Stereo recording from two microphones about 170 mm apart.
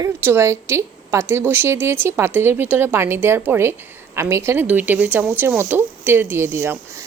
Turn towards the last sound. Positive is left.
turn(degrees=-15)  # may be behind; listen again after turning